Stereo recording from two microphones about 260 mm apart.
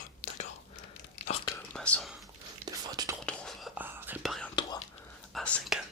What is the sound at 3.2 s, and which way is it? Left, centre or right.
Whispering, centre.